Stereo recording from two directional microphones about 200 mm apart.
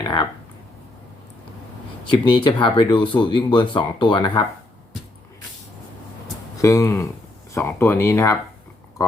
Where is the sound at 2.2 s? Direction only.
25° left (ahead or behind).